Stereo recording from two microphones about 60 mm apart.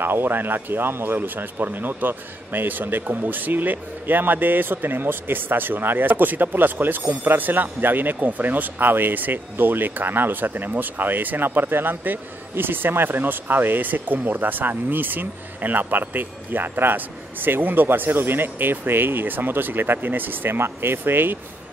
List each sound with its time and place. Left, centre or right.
0.0 s speech: right